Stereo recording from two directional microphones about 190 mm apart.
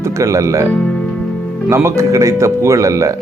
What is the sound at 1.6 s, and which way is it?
Speech, 15° right (ahead or behind).